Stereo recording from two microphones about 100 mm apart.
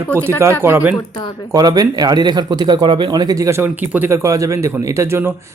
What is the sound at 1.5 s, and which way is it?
Speech, 40° right (ahead or behind).